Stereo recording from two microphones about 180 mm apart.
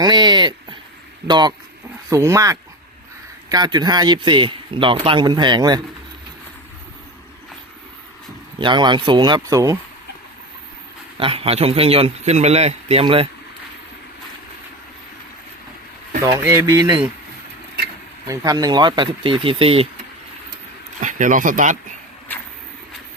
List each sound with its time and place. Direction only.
0.0 s speech: 25° right (ahead or behind)
8.5 s speech: 25° right (ahead or behind)
11.2 s a man's voice: 30° right (ahead or behind)
16.2 s speech: 15° right (ahead or behind)
18.3 s speech: 20° right (ahead or behind)
21.0 s speech: 45° right (ahead or behind)